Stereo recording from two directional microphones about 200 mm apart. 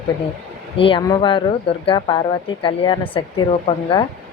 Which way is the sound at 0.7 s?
25° left (ahead or behind).